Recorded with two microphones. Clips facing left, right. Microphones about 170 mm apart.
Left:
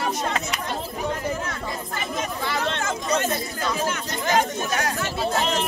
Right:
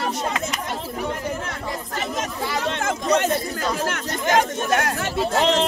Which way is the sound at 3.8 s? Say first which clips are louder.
Right 2 dB; 70° right (ahead or behind).